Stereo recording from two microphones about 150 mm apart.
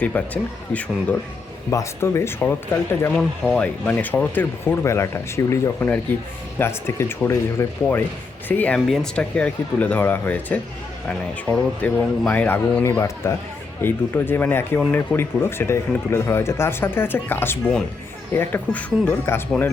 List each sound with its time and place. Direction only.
0.0 s speech: 10° left (ahead or behind)
3.2 s speech: 5° left (ahead or behind)